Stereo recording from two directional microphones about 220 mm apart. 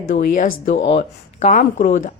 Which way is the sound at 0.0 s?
35° left (ahead or behind).